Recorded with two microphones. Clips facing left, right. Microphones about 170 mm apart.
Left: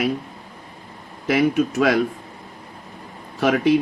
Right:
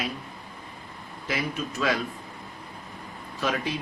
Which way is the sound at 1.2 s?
65° left (ahead or behind).